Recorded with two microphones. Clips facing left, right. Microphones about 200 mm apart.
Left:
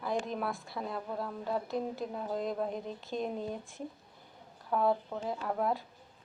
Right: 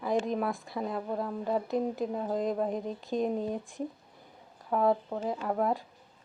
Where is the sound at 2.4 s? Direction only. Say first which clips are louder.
Right 4 dB; centre (ahead or behind).